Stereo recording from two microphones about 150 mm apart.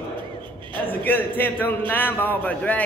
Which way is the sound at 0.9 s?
10° left (ahead or behind).